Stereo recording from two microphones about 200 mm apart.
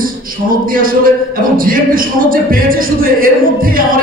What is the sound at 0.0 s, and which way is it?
A man's voice, 45° right (ahead or behind).